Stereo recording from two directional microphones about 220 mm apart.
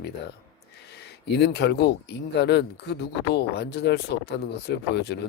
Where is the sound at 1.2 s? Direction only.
50° left (ahead or behind).